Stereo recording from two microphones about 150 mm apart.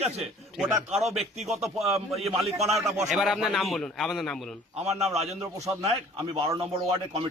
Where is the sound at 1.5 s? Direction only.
Centre (ahead or behind).